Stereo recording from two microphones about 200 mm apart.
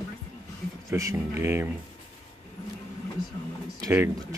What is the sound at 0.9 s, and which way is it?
Speech, 15° right (ahead or behind).